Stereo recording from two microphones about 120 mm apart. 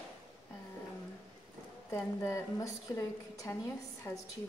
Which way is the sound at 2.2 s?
25° left (ahead or behind).